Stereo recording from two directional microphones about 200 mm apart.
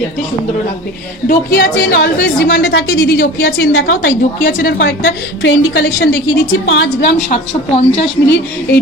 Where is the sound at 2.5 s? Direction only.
55° left (ahead or behind); by 4.1 s 85° left.